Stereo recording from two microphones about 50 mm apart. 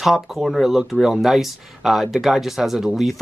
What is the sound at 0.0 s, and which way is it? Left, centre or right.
Speech, centre.